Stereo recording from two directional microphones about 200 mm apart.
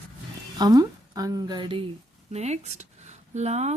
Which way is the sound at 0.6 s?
20° right (ahead or behind).